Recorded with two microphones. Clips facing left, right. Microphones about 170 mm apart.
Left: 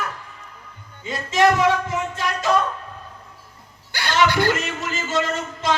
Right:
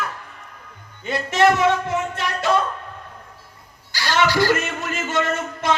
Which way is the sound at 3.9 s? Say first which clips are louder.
Even; 55° left (ahead or behind).